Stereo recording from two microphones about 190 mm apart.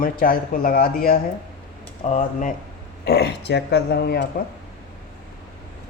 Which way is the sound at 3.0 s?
55° left (ahead or behind).